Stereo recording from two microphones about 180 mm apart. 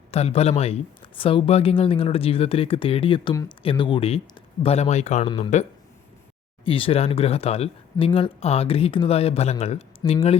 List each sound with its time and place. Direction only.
0.1 s speech: 35° left (ahead or behind)
6.7 s speech: 30° left (ahead or behind)
10.0 s speech: 20° left (ahead or behind)